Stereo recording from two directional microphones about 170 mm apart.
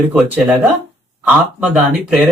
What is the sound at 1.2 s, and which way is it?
Speech, 5° right (ahead or behind).